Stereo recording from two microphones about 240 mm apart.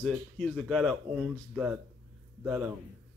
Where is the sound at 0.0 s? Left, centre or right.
Centre.